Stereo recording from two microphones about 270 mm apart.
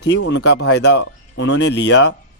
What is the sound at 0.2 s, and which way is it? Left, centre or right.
Speech, left.